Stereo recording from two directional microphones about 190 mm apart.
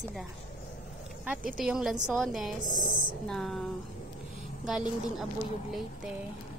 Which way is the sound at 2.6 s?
45° left (ahead or behind).